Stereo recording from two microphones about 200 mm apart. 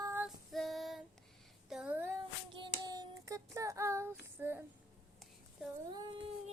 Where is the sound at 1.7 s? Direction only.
5° right (ahead or behind).